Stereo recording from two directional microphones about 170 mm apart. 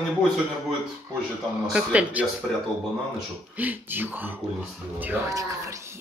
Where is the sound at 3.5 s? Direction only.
10° right (ahead or behind).